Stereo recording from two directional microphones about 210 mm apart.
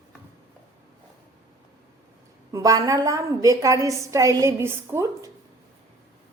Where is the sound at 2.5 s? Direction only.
15° right (ahead or behind).